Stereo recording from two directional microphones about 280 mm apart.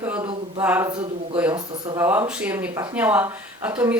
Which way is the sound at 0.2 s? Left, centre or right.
Centre.